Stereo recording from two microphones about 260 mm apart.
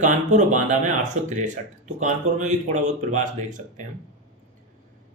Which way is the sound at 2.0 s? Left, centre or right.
Right.